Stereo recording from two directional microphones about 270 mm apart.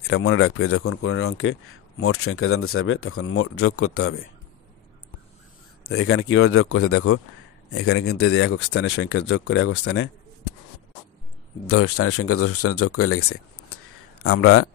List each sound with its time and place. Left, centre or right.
0.1 s speech: left
5.9 s speech: left
11.6 s speech: left